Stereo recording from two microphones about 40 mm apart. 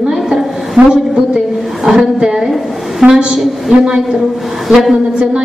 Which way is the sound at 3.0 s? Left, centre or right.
Centre.